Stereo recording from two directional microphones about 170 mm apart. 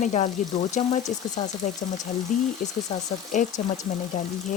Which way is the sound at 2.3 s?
45° left (ahead or behind).